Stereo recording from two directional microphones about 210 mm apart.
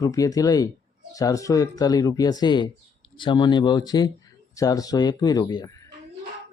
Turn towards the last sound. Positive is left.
turn(degrees=15)  # may be behind; listen again after turning